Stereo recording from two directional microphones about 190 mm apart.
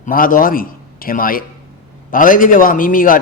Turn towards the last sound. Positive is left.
turn(degrees=45)  # may be behind; listen again after turning